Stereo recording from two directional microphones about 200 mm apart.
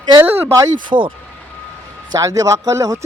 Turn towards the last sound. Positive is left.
turn(degrees=-15)  # may be behind; listen again after turning